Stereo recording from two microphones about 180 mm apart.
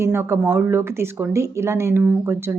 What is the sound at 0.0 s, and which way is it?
A woman's voice, 15° right (ahead or behind).